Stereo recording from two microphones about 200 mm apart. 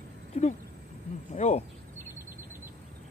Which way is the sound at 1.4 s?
35° left (ahead or behind).